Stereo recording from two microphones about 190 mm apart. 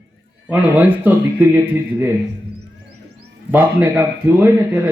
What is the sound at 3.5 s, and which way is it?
A man's voice, 10° right (ahead or behind).